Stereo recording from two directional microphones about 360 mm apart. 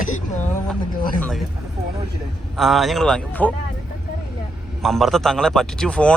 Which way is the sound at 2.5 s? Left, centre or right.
Centre.